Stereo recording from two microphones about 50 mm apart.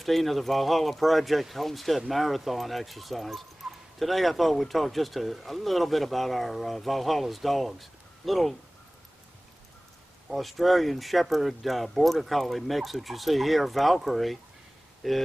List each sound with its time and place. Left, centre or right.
0.0 s speech: centre
10.3 s speech: centre